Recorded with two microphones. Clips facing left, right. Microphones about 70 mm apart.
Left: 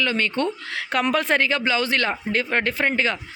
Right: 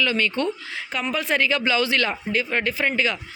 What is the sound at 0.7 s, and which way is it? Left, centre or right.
A man's voice, left.